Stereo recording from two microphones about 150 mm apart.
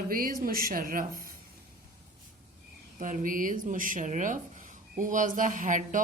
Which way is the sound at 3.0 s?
60° right (ahead or behind).